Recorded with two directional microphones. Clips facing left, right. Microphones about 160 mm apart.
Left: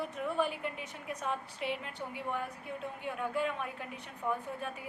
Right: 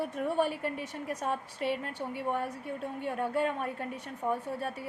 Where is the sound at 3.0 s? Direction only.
40° right (ahead or behind).